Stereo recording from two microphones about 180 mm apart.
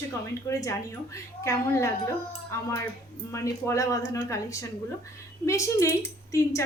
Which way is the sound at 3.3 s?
15° left (ahead or behind).